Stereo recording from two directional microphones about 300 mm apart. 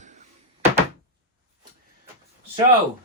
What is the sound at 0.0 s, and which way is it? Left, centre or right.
Door, right.